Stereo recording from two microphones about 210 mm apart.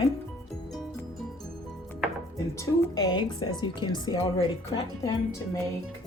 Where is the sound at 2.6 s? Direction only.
15° left (ahead or behind).